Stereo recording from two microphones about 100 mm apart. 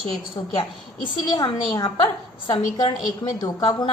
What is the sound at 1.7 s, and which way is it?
A woman's voice, 45° left (ahead or behind).